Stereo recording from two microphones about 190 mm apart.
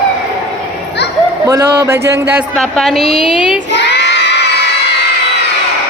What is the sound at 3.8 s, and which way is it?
Child singing, 65° left (ahead or behind).